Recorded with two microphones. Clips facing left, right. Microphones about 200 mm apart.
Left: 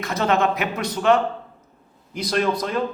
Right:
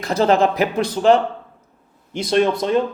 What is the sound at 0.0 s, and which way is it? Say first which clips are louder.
A man's voice: right 5 dB; 30° right (ahead or behind).